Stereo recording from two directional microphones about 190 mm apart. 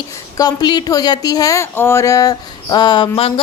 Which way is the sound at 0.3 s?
20° left (ahead or behind).